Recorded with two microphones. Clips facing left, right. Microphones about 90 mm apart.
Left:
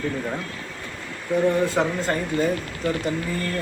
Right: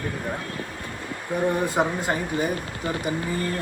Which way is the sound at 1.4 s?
15° right (ahead or behind).